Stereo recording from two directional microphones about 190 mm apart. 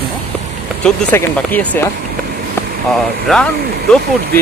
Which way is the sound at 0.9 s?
5° left (ahead or behind).